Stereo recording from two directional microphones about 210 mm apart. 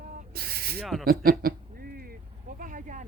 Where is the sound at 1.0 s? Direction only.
45° right (ahead or behind).